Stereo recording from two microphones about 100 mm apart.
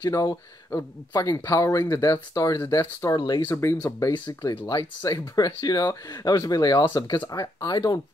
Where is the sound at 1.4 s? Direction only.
30° left (ahead or behind).